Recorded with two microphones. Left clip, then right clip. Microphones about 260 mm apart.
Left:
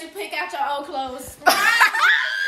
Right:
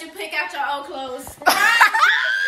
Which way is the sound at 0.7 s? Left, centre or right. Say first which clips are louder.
Left 1 dB; left.